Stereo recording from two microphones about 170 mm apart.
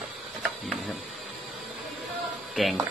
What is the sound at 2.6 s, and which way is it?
Speech, centre (ahead or behind).